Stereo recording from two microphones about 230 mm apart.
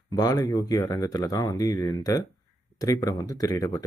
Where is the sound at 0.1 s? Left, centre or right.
Centre.